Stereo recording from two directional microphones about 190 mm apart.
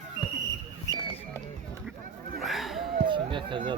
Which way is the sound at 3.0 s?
25° right (ahead or behind).